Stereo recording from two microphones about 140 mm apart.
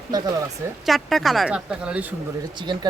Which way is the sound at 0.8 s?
Centre (ahead or behind).